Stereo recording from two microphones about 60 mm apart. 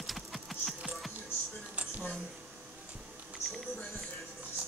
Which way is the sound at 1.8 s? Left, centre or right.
Right.